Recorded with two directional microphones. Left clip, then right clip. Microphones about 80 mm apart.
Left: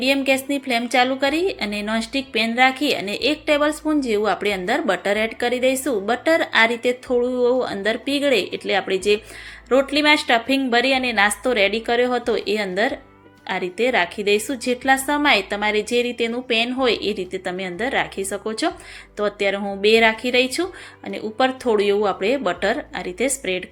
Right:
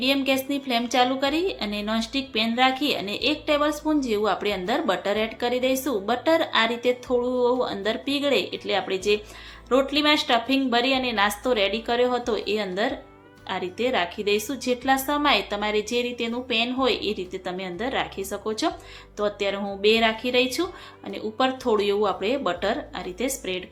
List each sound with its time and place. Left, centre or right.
0.0 s a woman's voice: left